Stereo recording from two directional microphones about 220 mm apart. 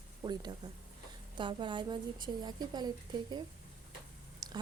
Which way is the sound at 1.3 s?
20° right (ahead or behind).